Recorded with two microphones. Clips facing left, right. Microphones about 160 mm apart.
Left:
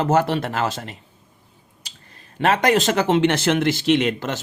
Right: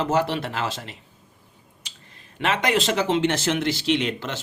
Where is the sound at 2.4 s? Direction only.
40° left (ahead or behind).